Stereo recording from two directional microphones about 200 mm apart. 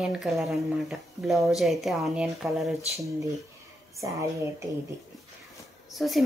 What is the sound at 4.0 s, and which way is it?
Speech, 15° right (ahead or behind).